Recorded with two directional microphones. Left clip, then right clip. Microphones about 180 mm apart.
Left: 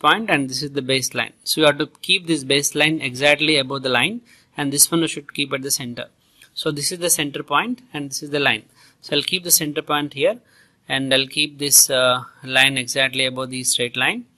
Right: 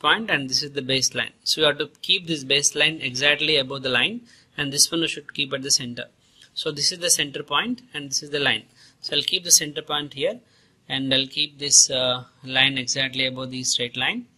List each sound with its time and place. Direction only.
0.0 s speech: 35° left (ahead or behind)